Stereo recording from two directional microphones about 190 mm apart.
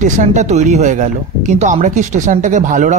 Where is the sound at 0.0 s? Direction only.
40° right (ahead or behind).